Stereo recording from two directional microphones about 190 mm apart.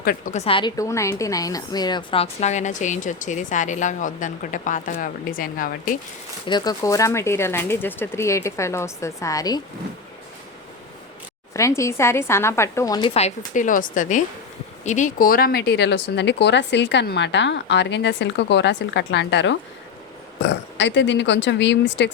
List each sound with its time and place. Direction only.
0.0 s a woman's voice: 50° left (ahead or behind)
0.3 s a woman's voice: 30° left (ahead or behind); by 6.0 s 45° left (ahead or behind)
6.4 s speech: 20° left (ahead or behind)
11.5 s speech: 15° left (ahead or behind); by 22.1 s 65° left (ahead or behind)